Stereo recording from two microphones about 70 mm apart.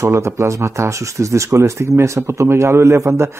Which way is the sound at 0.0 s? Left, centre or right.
Right.